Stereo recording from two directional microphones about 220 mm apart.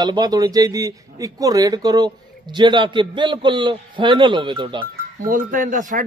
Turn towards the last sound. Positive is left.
turn(degrees=-35)  # may be behind; listen again after turning